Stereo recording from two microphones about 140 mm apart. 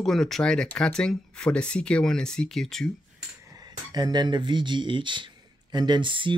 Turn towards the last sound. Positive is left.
turn(degrees=-35)  # may be behind; listen again after turning